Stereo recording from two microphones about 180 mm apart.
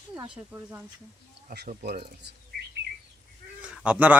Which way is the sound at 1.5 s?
60° right (ahead or behind).